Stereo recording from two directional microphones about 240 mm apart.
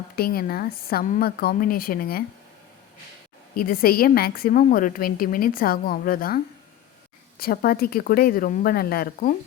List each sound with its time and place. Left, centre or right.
0.2 s a woman's voice: left
3.5 s a woman's voice: left